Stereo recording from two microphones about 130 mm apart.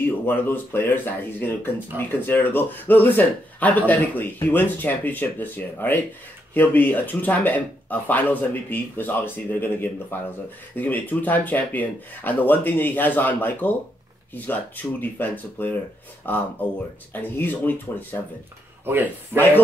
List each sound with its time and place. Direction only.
0.0 s speech: 15° left (ahead or behind)
18.9 s speech: 15° right (ahead or behind)